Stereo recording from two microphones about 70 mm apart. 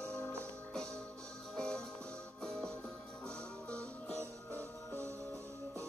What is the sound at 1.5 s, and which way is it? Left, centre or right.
Music, centre.